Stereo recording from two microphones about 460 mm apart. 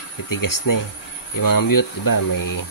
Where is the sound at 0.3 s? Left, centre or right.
Left.